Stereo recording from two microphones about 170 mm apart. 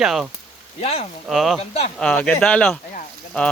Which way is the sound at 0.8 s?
35° left (ahead or behind).